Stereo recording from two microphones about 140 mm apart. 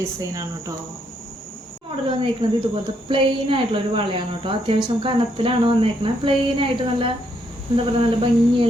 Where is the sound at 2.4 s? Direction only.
35° right (ahead or behind).